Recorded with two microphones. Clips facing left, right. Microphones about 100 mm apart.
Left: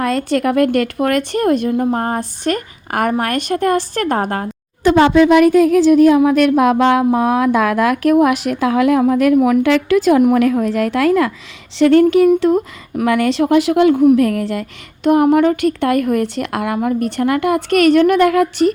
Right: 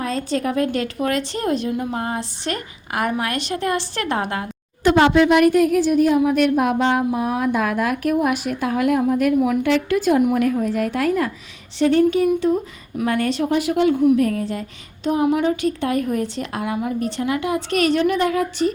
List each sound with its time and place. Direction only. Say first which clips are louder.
0.0 s a woman's voice: left 6 dB; 65° left (ahead or behind); by 4.4 s 45° left (ahead or behind)
5.8 s speech: left 7 dB; 90° left
12.4 s a woman's voice: left 5 dB; 75° left (ahead or behind)